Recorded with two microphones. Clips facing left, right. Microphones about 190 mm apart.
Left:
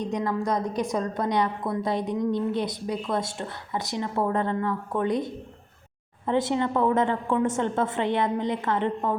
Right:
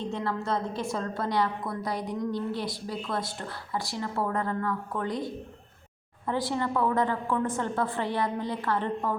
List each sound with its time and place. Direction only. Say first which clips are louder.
0.0 s a woman's voice: left 4 dB; 15° left (ahead or behind)